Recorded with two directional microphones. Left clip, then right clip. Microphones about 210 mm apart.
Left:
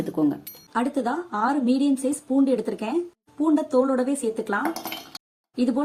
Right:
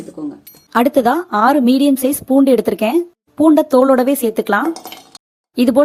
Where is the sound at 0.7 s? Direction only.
45° right (ahead or behind).